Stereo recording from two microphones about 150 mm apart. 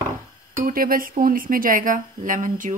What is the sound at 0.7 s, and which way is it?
Speech, 70° right (ahead or behind).